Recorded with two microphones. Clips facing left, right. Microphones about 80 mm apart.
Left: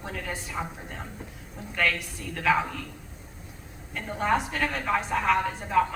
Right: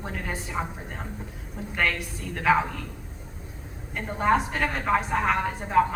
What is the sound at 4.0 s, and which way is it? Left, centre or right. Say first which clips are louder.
A woman's voice: right 3 dB; right.